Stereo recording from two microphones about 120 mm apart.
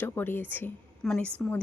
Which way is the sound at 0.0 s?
15° left (ahead or behind).